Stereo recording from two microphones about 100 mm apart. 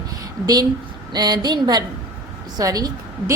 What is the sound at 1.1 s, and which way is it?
A woman's voice, 45° right (ahead or behind).